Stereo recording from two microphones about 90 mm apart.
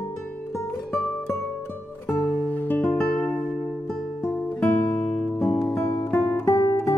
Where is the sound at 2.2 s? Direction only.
15° left (ahead or behind).